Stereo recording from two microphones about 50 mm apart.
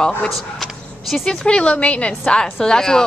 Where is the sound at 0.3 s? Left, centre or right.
Centre.